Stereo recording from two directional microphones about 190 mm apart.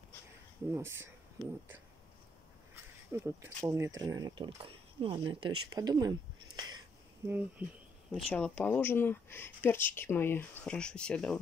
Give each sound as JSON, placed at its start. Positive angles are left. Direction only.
{"t": 0.7, "sound": "speech", "side_deg": -10}
{"t": 2.7, "sound": "speech", "side_deg": -15}
{"t": 7.2, "sound": "speech", "side_deg": -10}
{"t": 8.1, "sound": "speech", "side_deg": 0}